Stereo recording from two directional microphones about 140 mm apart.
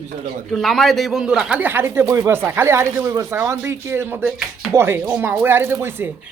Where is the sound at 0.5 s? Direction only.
Centre (ahead or behind); by 6.1 s 15° right (ahead or behind).